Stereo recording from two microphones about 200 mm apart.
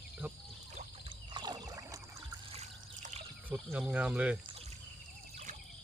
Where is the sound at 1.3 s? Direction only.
20° right (ahead or behind).